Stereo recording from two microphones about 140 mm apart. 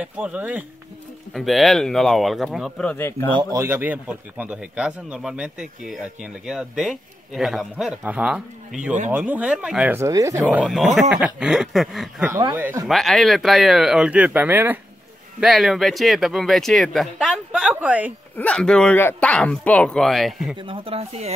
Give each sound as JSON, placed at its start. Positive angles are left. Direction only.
{"t": 0.0, "sound": "speech", "side_deg": -10}
{"t": 1.3, "sound": "speech", "side_deg": 0}
{"t": 3.5, "sound": "speech", "side_deg": -15}
{"t": 9.9, "sound": "speech", "side_deg": -20}
{"t": 10.5, "sound": "speech", "side_deg": -5}
{"t": 15.4, "sound": "speech", "side_deg": 0}
{"t": 18.4, "sound": "speech", "side_deg": 5}
{"t": 20.6, "sound": "speech", "side_deg": -40}